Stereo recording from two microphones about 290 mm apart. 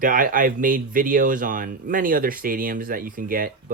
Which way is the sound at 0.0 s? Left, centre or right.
Right.